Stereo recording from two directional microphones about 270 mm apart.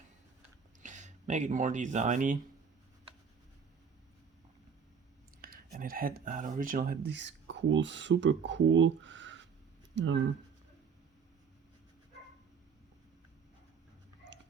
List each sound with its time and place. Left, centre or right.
0.8 s speech: right
5.4 s speech: right